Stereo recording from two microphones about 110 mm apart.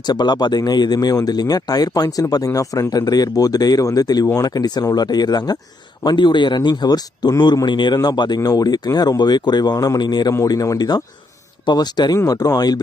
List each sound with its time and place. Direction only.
0.1 s speech: 40° left (ahead or behind)